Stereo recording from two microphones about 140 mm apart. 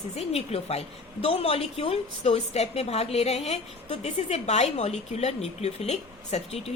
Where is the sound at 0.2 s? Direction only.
50° left (ahead or behind).